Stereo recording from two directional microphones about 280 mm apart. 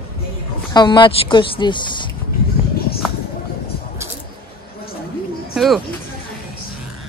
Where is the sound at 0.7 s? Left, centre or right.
Centre.